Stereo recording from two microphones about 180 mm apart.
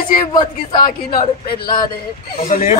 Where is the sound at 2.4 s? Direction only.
50° left (ahead or behind).